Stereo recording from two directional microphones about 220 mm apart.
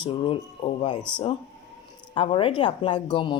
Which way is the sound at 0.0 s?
25° left (ahead or behind).